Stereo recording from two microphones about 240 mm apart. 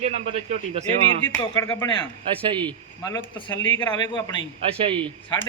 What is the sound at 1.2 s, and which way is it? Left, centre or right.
Speech, centre.